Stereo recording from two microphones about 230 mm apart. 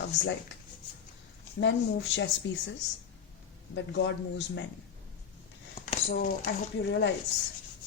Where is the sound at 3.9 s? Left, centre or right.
Left.